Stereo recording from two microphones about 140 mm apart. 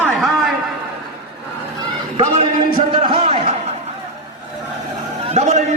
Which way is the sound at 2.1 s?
40° right (ahead or behind).